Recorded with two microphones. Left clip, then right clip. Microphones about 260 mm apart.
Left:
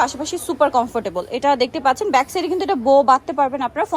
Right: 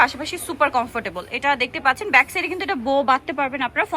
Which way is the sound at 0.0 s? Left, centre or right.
Centre.